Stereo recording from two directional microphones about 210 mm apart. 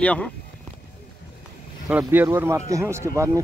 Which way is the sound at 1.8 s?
10° right (ahead or behind).